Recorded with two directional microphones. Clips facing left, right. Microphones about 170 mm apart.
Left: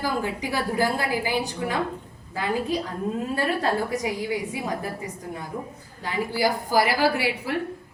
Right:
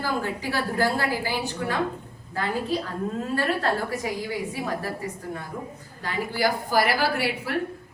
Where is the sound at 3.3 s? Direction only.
15° left (ahead or behind).